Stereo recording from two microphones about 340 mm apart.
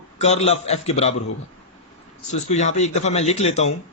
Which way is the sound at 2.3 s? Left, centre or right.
Centre.